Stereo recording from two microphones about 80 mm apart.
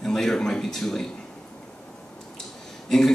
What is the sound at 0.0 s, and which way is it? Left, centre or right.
A man's voice, centre.